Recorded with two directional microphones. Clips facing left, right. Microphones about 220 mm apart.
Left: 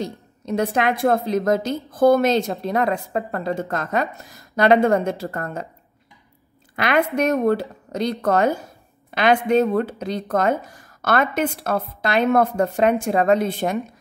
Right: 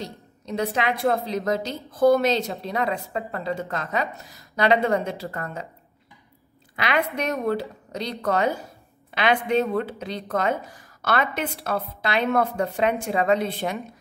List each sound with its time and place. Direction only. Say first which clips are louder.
0.0 s a woman's voice: left 7 dB; 50° left (ahead or behind)
6.7 s a woman's voice: left 5 dB; 50° left (ahead or behind)